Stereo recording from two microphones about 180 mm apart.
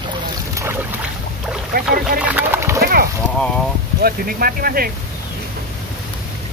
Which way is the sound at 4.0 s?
55° right (ahead or behind).